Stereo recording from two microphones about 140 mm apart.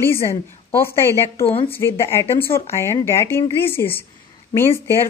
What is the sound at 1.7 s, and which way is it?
Speech, 20° left (ahead or behind).